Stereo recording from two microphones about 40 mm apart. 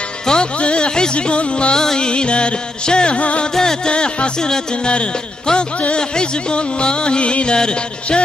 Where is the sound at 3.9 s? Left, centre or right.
Left.